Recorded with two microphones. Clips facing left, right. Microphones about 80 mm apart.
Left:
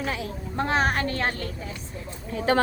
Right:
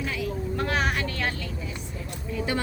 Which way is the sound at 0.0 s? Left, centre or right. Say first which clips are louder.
Right 1 dB; left.